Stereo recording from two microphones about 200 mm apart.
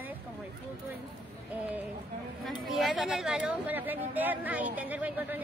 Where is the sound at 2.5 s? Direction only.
Centre (ahead or behind).